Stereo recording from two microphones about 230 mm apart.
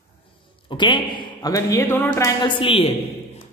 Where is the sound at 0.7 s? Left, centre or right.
Left.